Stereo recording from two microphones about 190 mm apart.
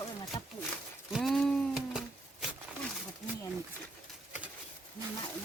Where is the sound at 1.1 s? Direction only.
Centre (ahead or behind).